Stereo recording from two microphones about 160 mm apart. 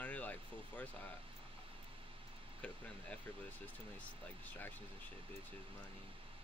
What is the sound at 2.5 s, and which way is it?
Speech, 10° left (ahead or behind).